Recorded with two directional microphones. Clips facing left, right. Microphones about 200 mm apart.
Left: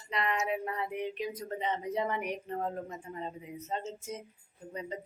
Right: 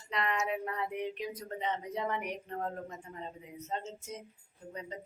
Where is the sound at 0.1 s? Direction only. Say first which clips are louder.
Left 1 dB; 5° left (ahead or behind).